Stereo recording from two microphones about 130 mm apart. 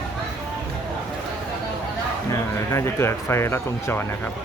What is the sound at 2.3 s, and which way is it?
Speech, 20° left (ahead or behind).